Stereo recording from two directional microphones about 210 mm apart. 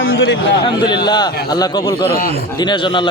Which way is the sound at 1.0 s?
20° left (ahead or behind).